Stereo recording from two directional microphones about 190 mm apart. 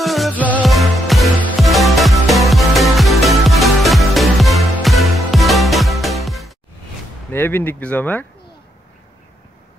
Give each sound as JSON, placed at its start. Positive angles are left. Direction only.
{"t": 0.0, "sound": "music", "side_deg": 0}
{"t": 7.3, "sound": "speech", "side_deg": 10}